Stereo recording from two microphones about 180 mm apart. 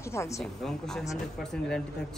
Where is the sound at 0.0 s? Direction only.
15° left (ahead or behind).